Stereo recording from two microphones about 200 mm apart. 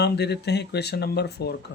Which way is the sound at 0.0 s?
55° left (ahead or behind).